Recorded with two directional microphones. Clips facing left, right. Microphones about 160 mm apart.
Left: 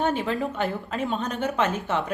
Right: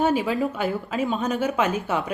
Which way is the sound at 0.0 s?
10° right (ahead or behind).